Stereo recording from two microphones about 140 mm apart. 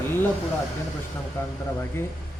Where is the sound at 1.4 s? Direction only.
20° left (ahead or behind).